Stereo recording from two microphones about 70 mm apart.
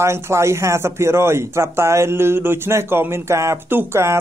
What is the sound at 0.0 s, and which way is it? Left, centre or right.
Speech, right.